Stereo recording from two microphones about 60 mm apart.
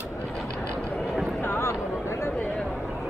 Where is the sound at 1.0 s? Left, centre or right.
Centre.